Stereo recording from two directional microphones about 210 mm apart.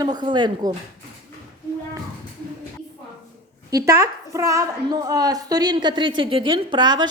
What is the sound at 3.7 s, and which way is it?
A woman's voice, 15° right (ahead or behind).